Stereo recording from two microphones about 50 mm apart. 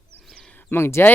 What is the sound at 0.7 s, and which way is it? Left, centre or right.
Speech, left.